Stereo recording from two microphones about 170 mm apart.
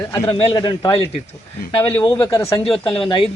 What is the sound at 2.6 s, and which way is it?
Speech, 30° left (ahead or behind).